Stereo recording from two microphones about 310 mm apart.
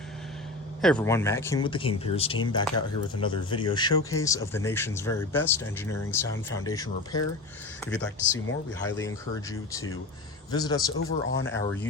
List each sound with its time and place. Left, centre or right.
0.8 s speech: centre
10.9 s speech: left